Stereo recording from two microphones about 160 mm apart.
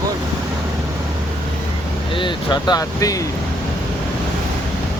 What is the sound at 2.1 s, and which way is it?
Speech, 30° left (ahead or behind).